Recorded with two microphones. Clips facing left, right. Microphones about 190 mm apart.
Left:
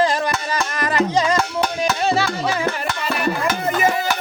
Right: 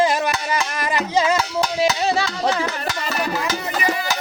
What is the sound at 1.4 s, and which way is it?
Cowbell, 55° left (ahead or behind).